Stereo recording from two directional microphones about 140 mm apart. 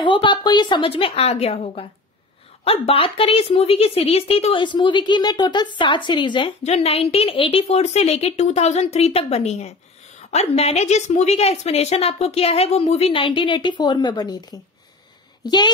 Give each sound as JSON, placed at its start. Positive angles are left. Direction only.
{"t": 0.0, "sound": "a woman's voice", "side_deg": 35}
{"t": 2.9, "sound": "a woman's voice", "side_deg": 40}
{"t": 6.6, "sound": "a woman's voice", "side_deg": 45}